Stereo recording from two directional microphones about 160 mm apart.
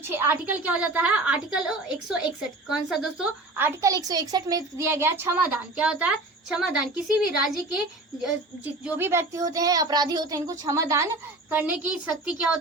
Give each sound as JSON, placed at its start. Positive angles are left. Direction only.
{"t": 0.1, "sound": "a woman's voice", "side_deg": -15}
{"t": 3.8, "sound": "a woman's voice", "side_deg": -20}
{"t": 8.8, "sound": "speech", "side_deg": -15}
{"t": 11.5, "sound": "a woman's voice", "side_deg": -10}